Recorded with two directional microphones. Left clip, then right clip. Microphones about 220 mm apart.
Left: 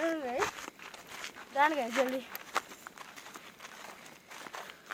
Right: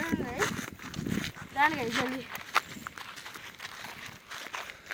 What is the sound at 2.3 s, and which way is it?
Walk, 45° right (ahead or behind).